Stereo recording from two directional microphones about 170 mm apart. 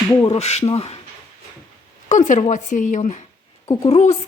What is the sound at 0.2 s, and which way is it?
Speech, 35° left (ahead or behind).